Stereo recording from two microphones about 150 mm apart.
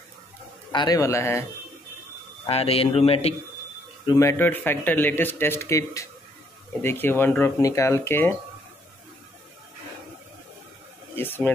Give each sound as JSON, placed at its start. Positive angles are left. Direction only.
{"t": 0.7, "sound": "a man's voice", "side_deg": 25}
{"t": 2.4, "sound": "a man's voice", "side_deg": 40}
{"t": 4.1, "sound": "speech", "side_deg": 20}
{"t": 11.1, "sound": "speech", "side_deg": 15}